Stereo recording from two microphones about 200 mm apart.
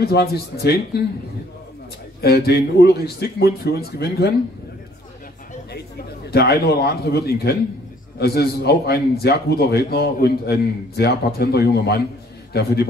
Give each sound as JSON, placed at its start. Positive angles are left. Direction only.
{"t": 0.0, "sound": "a man's voice", "side_deg": 50}
{"t": 2.2, "sound": "a man's voice", "side_deg": 50}
{"t": 6.3, "sound": "a man's voice", "side_deg": 50}